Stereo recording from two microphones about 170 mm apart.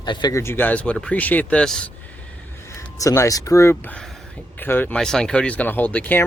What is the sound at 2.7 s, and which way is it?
Speech, 20° left (ahead or behind).